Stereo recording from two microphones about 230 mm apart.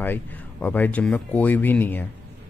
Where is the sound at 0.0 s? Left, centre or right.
Centre.